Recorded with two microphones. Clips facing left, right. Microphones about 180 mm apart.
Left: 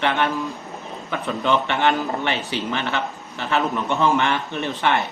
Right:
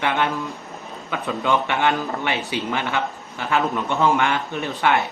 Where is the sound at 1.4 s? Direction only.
10° right (ahead or behind).